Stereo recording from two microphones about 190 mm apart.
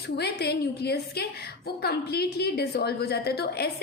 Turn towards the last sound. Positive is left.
turn(degrees=55)  # may be behind; listen again after turning